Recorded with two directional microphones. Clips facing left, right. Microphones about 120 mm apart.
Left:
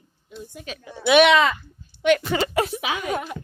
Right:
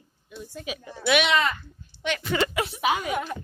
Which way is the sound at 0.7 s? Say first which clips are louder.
Right 3 dB; 10° right (ahead or behind).